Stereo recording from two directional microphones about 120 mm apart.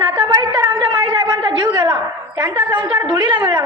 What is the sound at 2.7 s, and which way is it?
Speech, 40° right (ahead or behind).